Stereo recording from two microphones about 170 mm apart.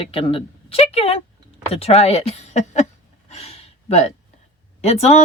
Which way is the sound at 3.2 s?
40° left (ahead or behind).